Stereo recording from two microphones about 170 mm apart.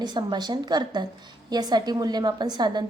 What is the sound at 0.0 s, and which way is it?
A woman's voice, 25° right (ahead or behind).